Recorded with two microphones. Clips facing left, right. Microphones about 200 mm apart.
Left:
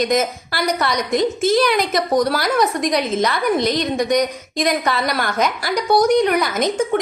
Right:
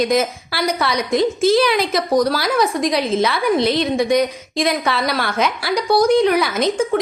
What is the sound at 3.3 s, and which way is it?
Speech, 45° left (ahead or behind).